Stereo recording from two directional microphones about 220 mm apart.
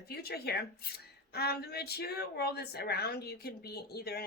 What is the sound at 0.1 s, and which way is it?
A woman's voice, 45° left (ahead or behind).